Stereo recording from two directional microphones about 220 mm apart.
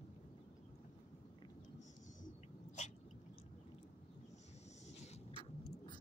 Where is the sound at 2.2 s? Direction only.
30° left (ahead or behind).